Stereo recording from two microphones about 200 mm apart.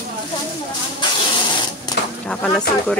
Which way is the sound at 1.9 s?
20° left (ahead or behind).